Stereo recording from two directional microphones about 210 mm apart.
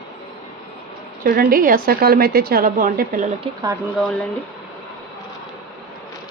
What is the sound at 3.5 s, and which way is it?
Speech, 25° right (ahead or behind).